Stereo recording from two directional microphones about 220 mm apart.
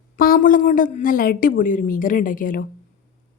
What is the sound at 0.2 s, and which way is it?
A woman's voice, 40° left (ahead or behind).